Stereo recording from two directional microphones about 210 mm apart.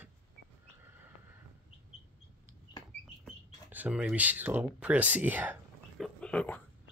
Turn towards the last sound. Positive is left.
turn(degrees=5)  # may be behind; listen again after turning